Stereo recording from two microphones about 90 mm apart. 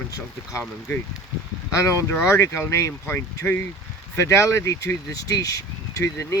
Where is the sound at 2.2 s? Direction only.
30° left (ahead or behind).